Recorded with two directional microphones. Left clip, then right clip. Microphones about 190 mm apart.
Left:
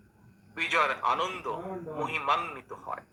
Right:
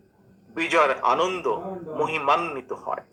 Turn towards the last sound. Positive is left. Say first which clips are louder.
# right 8 dB
turn(degrees=-45)  # may be behind; listen again after turning